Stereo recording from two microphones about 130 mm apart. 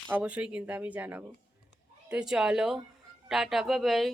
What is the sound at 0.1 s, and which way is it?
A woman's voice, 10° right (ahead or behind).